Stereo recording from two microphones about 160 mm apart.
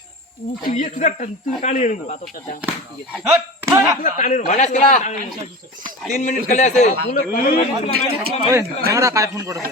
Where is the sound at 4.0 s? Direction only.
55° left (ahead or behind).